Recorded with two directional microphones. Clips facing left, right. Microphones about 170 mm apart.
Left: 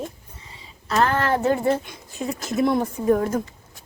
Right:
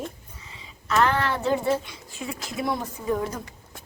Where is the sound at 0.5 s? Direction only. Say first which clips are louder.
Left 1 dB; 35° left (ahead or behind).